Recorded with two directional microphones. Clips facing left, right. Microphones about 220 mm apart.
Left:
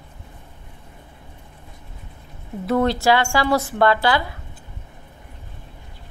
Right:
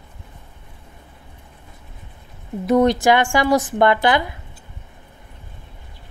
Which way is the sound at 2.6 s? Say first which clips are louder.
Right 3 dB; 20° right (ahead or behind).